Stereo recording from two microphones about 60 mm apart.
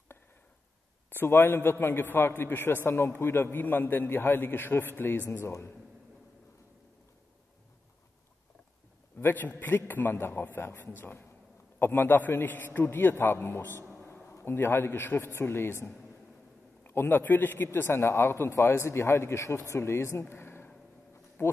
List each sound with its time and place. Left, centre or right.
1.1 s a man's voice: left
9.2 s a man's voice: left
13.9 s a sound: left
14.3 s a man's voice: left